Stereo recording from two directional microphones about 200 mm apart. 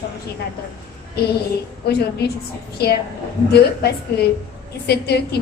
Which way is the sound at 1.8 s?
50° left (ahead or behind).